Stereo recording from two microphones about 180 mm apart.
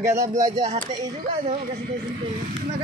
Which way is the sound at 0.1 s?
40° right (ahead or behind).